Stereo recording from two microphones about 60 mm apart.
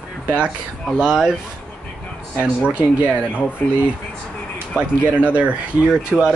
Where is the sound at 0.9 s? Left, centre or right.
Centre.